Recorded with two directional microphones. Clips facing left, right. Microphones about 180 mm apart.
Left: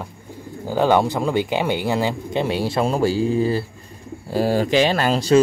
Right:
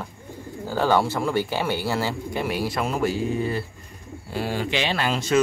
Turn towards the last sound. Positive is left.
turn(degrees=35)  # may be behind; listen again after turning